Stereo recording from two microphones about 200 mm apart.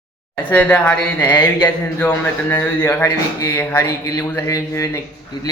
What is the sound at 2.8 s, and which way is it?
Speech, 10° left (ahead or behind).